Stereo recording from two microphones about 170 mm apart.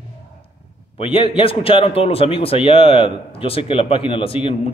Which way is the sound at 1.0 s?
30° left (ahead or behind).